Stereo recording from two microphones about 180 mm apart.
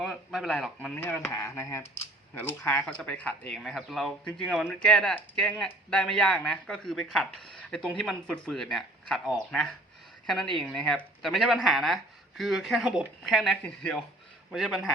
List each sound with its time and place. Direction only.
0.0 s speech: centre (ahead or behind)